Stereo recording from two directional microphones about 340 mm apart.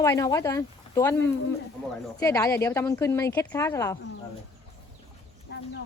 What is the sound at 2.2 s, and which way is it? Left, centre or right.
Speech, centre.